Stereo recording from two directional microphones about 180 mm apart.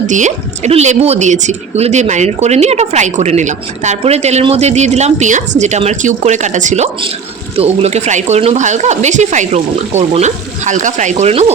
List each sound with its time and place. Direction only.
0.1 s speech: 40° right (ahead or behind)